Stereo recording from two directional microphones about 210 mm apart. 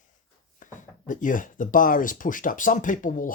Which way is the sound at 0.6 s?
40° left (ahead or behind).